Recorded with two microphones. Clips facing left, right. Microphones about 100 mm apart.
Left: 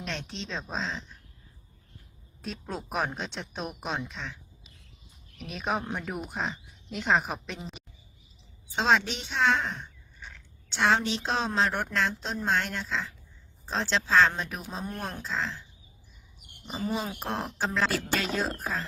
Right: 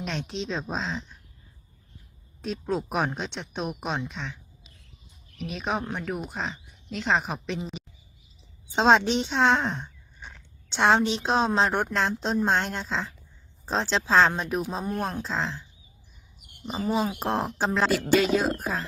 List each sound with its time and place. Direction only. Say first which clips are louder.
0.0 s speech: right 5 dB; centre (ahead or behind)
2.4 s speech: right 8 dB; centre (ahead or behind)
5.4 s speech: right 2 dB; centre (ahead or behind)
8.7 s speech: right 5 dB; 30° right (ahead or behind); by 15.2 s 10° right (ahead or behind)
15.2 s speech: right 3 dB; 25° right (ahead or behind)
16.6 s speech: right 5 dB; 5° right (ahead or behind)
17.2 s speech: right 5 dB; 20° right (ahead or behind)
17.9 s speech: right 8 dB; 5° right (ahead or behind)